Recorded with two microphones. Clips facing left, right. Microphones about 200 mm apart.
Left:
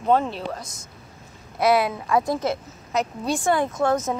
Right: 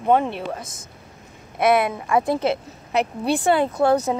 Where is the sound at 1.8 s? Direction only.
Centre (ahead or behind).